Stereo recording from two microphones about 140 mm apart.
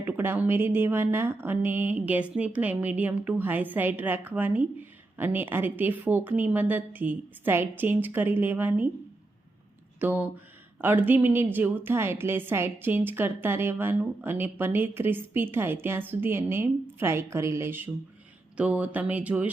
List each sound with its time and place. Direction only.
0.0 s a woman's voice: 15° right (ahead or behind)
10.0 s a woman's voice: 15° right (ahead or behind)